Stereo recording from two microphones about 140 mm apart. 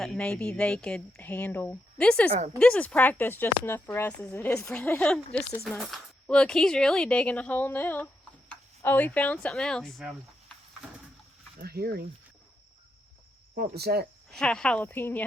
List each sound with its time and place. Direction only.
0.0 s speech: 5° left (ahead or behind)
11.6 s speech: 90° right
13.9 s speech: 90° right
14.3 s speech: 5° left (ahead or behind)